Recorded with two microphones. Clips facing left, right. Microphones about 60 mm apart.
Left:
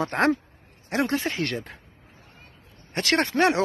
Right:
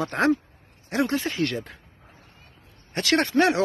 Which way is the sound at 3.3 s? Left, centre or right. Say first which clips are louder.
Right 1 dB; left.